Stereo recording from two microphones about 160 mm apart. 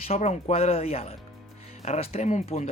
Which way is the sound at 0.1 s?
45° left (ahead or behind).